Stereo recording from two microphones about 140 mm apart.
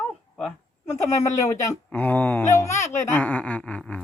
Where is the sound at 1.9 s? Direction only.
10° left (ahead or behind).